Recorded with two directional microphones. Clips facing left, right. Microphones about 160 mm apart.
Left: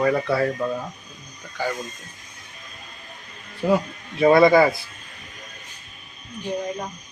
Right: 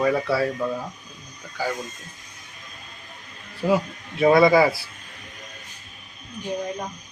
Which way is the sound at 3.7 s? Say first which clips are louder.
Left 1 dB; centre (ahead or behind).